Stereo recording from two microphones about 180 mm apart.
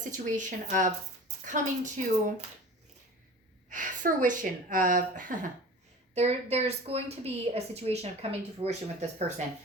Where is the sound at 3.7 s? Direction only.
45° right (ahead or behind).